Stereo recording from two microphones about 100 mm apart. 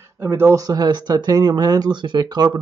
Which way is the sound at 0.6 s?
45° right (ahead or behind).